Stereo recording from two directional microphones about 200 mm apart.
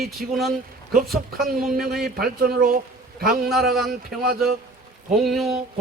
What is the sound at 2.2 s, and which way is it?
Speech, 50° right (ahead or behind).